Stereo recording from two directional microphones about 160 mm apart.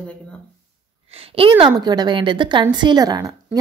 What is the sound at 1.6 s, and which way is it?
A woman's voice, 25° right (ahead or behind).